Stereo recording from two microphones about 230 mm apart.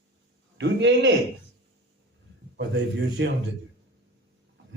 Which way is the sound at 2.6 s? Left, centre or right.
Right.